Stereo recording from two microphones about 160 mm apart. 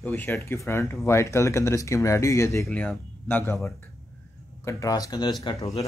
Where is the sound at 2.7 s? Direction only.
10° left (ahead or behind); by 5.3 s 25° left (ahead or behind).